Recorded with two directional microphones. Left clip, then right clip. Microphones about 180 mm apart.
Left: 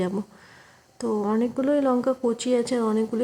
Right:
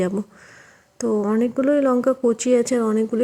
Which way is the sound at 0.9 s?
15° right (ahead or behind).